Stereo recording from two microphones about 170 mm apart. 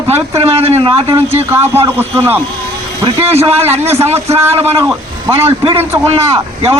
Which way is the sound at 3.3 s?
35° right (ahead or behind).